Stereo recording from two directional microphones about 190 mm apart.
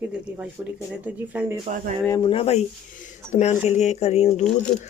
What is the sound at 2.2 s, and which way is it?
Speech, 30° left (ahead or behind).